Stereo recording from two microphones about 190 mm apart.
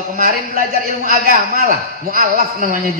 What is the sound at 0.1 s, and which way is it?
A man's voice, 50° right (ahead or behind).